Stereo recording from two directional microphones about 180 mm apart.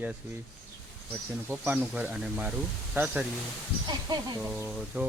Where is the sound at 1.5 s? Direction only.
10° right (ahead or behind).